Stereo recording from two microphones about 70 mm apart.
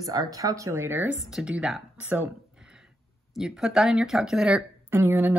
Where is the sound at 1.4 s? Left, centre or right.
Centre.